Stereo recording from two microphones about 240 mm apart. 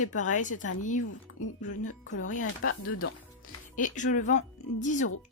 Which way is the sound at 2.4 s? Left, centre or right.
Left.